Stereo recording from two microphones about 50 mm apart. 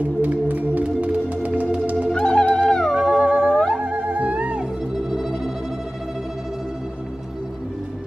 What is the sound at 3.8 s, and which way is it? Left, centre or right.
Music, right.